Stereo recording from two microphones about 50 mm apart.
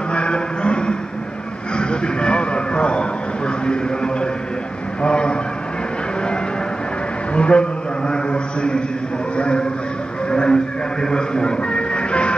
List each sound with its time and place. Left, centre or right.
0.1 s a sound: left
5.0 s a man's voice: centre
7.3 s a man's voice: left
8.1 s a sound: centre
9.4 s a man's voice: left
10.3 s music: centre